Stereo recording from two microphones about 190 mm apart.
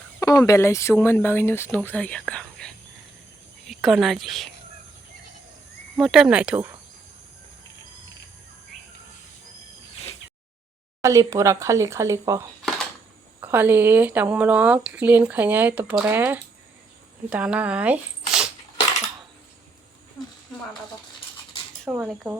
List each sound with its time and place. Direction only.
0.2 s speech: 20° left (ahead or behind); by 4.4 s centre (ahead or behind)
6.0 s speech: centre (ahead or behind)
11.0 s speech: 15° right (ahead or behind)
21.8 s speech: 5° right (ahead or behind)